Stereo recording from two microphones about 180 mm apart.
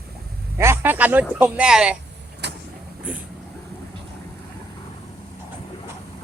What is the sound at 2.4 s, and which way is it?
Vehicle, 75° right (ahead or behind).